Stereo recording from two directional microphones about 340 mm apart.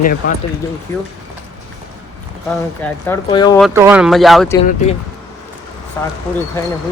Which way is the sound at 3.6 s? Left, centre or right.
Centre.